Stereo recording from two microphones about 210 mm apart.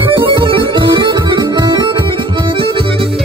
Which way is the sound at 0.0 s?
25° right (ahead or behind).